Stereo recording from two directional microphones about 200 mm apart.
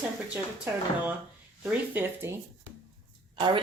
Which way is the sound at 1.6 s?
10° right (ahead or behind).